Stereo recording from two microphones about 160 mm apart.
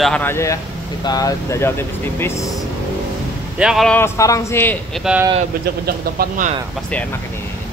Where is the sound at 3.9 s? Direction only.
15° left (ahead or behind).